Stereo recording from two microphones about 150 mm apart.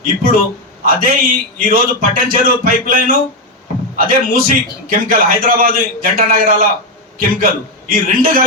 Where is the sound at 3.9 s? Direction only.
70° right (ahead or behind).